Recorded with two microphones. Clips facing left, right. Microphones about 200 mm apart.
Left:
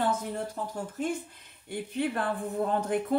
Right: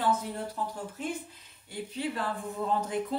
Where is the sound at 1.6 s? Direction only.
55° left (ahead or behind).